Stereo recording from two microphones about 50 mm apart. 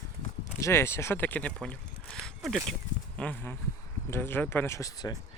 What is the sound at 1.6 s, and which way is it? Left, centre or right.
Speech, centre.